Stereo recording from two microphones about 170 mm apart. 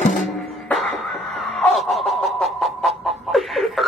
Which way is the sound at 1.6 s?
Centre (ahead or behind).